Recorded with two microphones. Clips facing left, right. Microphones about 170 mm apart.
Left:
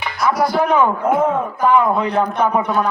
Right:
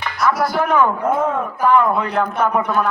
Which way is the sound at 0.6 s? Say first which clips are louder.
Right 1 dB; 15° left (ahead or behind).